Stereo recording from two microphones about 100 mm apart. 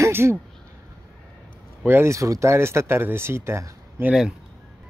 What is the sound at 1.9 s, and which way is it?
Speech, 25° right (ahead or behind).